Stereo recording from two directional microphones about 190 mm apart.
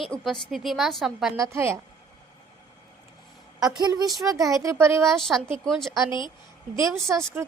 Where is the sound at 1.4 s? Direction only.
15° right (ahead or behind).